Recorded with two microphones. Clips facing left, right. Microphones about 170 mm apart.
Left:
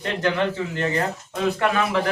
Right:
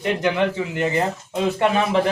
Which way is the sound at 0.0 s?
15° right (ahead or behind).